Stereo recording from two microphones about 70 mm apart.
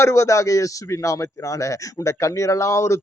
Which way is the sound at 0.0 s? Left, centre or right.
Left.